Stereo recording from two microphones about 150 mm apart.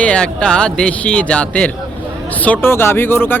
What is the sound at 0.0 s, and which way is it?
Speech, 5° left (ahead or behind).